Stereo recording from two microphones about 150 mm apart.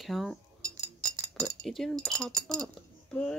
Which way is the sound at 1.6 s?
Centre (ahead or behind).